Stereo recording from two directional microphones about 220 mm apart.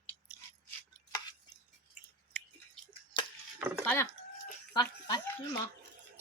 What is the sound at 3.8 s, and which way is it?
Speech, 10° left (ahead or behind).